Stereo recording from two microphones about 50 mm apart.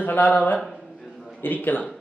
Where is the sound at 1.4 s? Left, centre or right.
Left.